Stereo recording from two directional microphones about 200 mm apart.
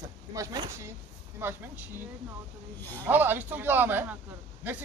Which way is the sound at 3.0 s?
10° right (ahead or behind).